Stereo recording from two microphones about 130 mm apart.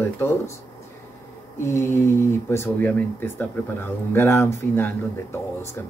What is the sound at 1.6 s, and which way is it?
Speech, 20° left (ahead or behind).